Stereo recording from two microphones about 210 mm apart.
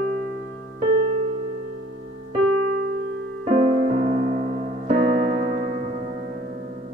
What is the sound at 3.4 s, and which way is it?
Music, 30° right (ahead or behind).